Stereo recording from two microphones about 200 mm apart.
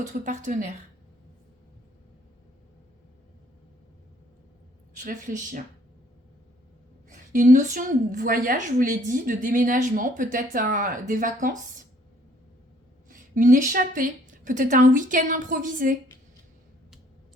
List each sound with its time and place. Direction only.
0.1 s a woman's voice: 40° right (ahead or behind)
5.0 s a woman's voice: 40° right (ahead or behind)
7.3 s a woman's voice: 40° right (ahead or behind)
13.1 s a woman's voice: 40° right (ahead or behind)